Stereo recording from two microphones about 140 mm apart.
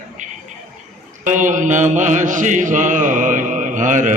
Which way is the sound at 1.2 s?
65° right (ahead or behind).